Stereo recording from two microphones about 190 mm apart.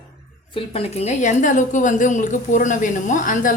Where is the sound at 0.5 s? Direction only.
30° left (ahead or behind).